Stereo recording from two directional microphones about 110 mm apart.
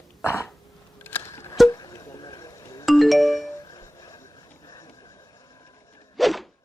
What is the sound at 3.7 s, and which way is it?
Music, 30° left (ahead or behind).